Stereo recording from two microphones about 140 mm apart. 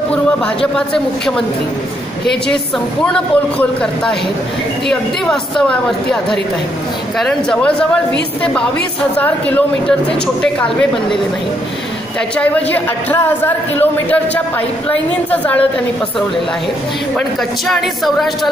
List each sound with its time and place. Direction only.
0.7 s a woman's voice: 5° left (ahead or behind)
3.1 s a woman's voice: 5° left (ahead or behind)
7.2 s speech: 5° left (ahead or behind)
9.2 s speech: 10° left (ahead or behind)
12.4 s speech: 10° left (ahead or behind)
17.6 s a woman's voice: centre (ahead or behind)